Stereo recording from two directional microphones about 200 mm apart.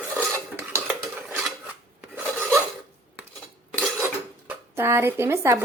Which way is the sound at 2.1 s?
5° right (ahead or behind).